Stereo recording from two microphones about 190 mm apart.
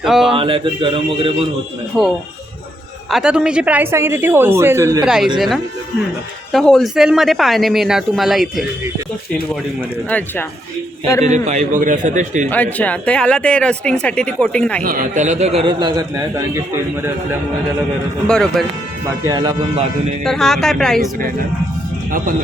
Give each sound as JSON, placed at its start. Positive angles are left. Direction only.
{"t": 0.0, "sound": "speech", "side_deg": 0}
{"t": 0.3, "sound": "speech", "side_deg": -25}
{"t": 1.9, "sound": "a woman's voice", "side_deg": 0}
{"t": 5.0, "sound": "speech", "side_deg": -5}
{"t": 6.5, "sound": "speech", "side_deg": 0}
{"t": 10.1, "sound": "speech", "side_deg": 10}
{"t": 11.2, "sound": "a man's voice", "side_deg": -40}
{"t": 12.5, "sound": "speech", "side_deg": 10}
{"t": 14.8, "sound": "a man's voice", "side_deg": -45}
{"t": 18.3, "sound": "speech", "side_deg": 5}
{"t": 19.0, "sound": "speech", "side_deg": -20}
{"t": 20.2, "sound": "speech", "side_deg": 0}